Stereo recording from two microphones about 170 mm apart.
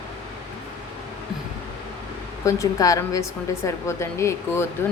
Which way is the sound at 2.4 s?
20° left (ahead or behind).